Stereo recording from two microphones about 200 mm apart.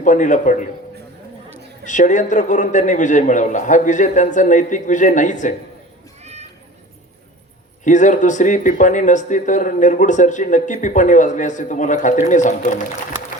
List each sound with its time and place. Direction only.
0.0 s speech: 40° left (ahead or behind)
1.8 s speech: 40° left (ahead or behind)
7.9 s speech: 40° left (ahead or behind)